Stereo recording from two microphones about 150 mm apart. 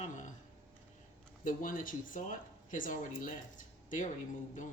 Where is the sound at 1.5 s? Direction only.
65° left (ahead or behind).